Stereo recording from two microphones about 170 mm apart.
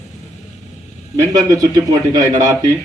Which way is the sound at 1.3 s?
20° right (ahead or behind).